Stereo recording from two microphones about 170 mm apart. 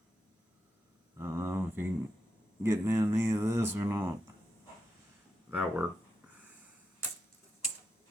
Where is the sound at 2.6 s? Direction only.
15° right (ahead or behind).